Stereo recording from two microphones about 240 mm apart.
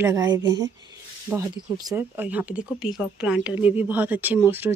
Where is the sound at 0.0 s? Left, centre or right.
Centre.